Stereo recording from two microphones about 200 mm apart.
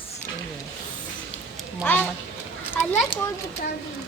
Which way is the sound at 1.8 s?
10° left (ahead or behind).